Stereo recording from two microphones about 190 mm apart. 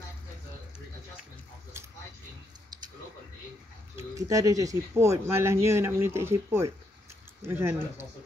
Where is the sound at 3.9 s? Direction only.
15° right (ahead or behind).